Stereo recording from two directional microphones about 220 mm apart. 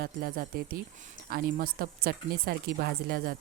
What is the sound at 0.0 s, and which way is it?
Speech, 40° right (ahead or behind).